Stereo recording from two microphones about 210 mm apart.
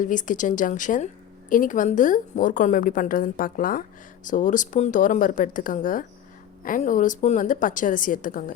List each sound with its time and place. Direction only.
0.0 s a woman's voice: 40° left (ahead or behind)